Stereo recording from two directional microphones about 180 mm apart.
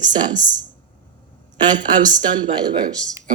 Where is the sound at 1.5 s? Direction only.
25° right (ahead or behind).